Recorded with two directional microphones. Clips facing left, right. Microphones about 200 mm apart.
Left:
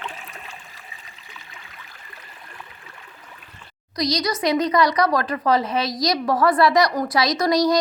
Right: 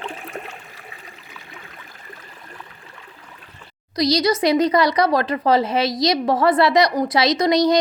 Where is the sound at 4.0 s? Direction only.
30° right (ahead or behind).